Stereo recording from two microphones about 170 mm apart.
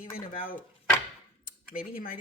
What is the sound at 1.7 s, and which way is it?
Speech, 55° left (ahead or behind).